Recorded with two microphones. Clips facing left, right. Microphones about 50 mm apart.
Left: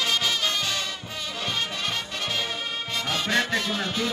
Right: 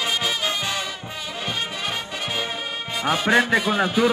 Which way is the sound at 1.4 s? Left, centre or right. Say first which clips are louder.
Right 1 dB; centre.